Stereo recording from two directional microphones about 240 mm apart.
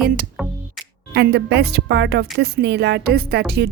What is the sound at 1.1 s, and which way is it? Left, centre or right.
A woman's voice, right.